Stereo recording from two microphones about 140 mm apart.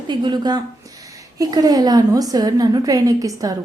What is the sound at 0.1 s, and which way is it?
A woman's voice, 30° right (ahead or behind).